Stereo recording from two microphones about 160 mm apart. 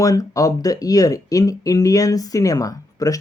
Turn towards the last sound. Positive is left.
turn(degrees=20)  # may be behind; listen again after turning